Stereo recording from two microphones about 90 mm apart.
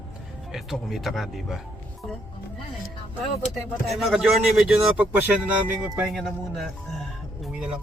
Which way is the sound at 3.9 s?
Centre (ahead or behind).